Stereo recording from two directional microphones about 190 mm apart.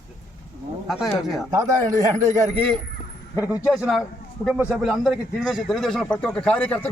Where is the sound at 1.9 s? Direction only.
40° right (ahead or behind).